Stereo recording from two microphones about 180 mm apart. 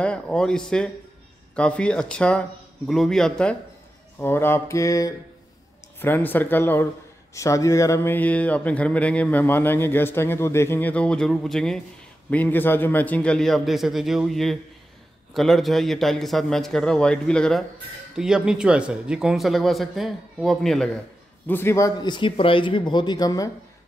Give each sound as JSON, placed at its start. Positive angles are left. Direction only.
{"t": 0.0, "sound": "speech", "side_deg": 5}